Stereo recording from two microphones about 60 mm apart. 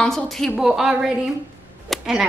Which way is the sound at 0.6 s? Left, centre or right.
Centre.